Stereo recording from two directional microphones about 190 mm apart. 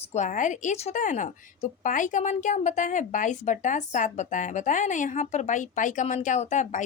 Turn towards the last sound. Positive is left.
turn(degrees=40)  # may be behind; listen again after turning